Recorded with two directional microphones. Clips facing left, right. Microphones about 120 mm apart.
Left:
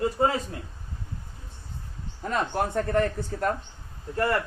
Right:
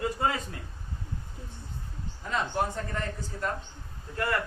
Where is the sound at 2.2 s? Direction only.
50° left (ahead or behind).